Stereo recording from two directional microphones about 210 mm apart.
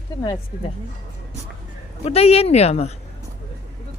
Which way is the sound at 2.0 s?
30° left (ahead or behind).